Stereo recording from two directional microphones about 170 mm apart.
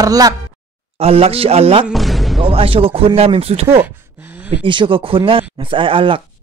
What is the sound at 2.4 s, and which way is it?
Speech, 35° right (ahead or behind).